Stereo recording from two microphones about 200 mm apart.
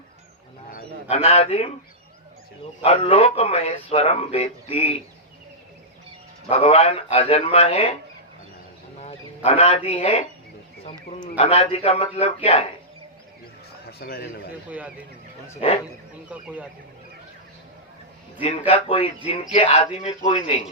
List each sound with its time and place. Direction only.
0.7 s a man's voice: 35° left (ahead or behind)
2.8 s speech: 25° left (ahead or behind)
6.5 s speech: 30° left (ahead or behind)
9.0 s speech: 30° left (ahead or behind)
10.8 s a sound: 30° left (ahead or behind)
11.3 s speech: 30° left (ahead or behind)
14.0 s a man's voice: 50° left (ahead or behind)
14.7 s speech: 5° right (ahead or behind)
15.6 s speech: 30° left (ahead or behind)
16.3 s speech: 5° right (ahead or behind)
18.7 s speech: 25° left (ahead or behind)